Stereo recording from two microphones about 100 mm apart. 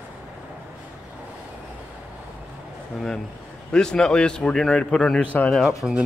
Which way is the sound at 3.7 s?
5° left (ahead or behind).